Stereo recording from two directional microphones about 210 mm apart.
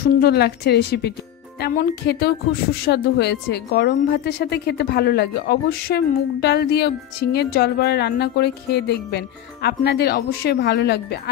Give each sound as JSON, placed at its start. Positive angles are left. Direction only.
{"t": 0.0, "sound": "speech", "side_deg": 50}